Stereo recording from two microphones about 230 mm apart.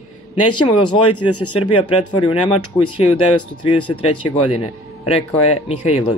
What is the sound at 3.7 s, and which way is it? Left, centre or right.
Speech, left.